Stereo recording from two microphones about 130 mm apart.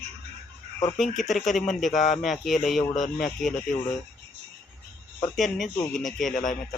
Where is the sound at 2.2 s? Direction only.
Centre (ahead or behind).